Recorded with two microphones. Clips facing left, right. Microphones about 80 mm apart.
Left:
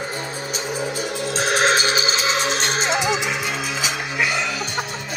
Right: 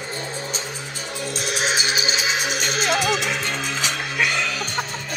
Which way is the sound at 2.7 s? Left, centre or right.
Left.